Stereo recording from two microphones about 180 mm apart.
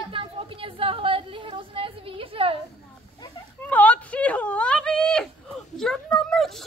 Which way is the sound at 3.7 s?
10° left (ahead or behind).